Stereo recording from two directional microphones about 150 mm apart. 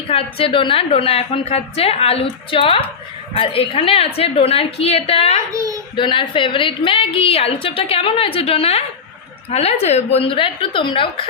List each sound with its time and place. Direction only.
0.1 s a woman's voice: 40° left (ahead or behind)
5.5 s a child's voice: 20° right (ahead or behind)
6.0 s a woman's voice: 35° left (ahead or behind)